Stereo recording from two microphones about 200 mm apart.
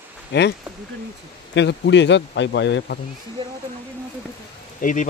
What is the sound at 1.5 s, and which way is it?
A man's voice, 60° left (ahead or behind).